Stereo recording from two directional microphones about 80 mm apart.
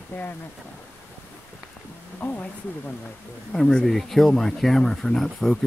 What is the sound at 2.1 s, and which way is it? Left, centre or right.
Speech, left.